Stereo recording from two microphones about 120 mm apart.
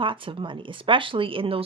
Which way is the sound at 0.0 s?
45° right (ahead or behind).